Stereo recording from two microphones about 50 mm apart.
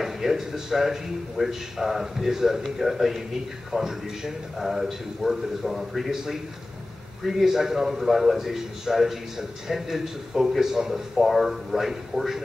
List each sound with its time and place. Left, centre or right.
0.0 s a man's voice: centre